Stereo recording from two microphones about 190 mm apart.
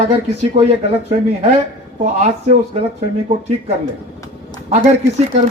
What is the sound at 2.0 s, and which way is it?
Speech, 40° right (ahead or behind).